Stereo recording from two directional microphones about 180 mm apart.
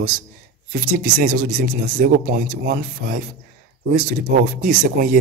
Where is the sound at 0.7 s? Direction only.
50° right (ahead or behind).